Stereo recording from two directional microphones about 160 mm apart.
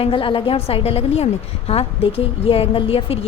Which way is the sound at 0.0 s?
35° left (ahead or behind).